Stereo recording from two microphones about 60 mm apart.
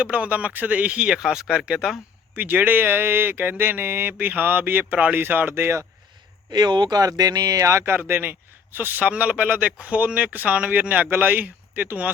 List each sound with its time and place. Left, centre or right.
0.0 s speech: right
2.3 s speech: right
6.9 s speech: right
7.7 s speech: right
7.9 s speech: right